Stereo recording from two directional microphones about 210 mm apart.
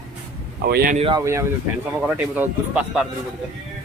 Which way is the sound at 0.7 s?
45° right (ahead or behind).